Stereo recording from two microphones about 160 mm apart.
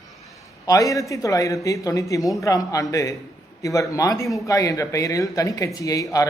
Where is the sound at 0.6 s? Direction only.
20° left (ahead or behind).